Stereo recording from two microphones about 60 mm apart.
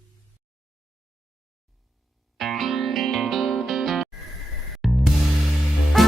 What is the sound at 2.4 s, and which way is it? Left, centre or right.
Music, centre.